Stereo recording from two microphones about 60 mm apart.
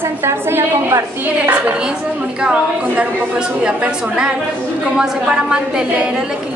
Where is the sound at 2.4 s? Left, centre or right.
Centre.